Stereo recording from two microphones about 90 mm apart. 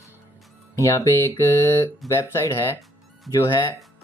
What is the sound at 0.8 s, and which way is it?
Speech, 35° left (ahead or behind).